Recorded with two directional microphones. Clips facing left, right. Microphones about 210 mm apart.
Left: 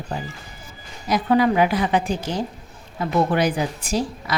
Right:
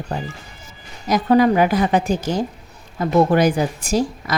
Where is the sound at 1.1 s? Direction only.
40° right (ahead or behind).